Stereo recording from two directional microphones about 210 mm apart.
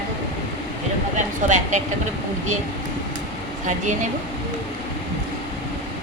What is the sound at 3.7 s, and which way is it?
Speech, 35° right (ahead or behind).